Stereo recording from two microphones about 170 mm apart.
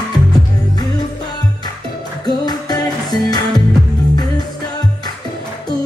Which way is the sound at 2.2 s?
25° left (ahead or behind).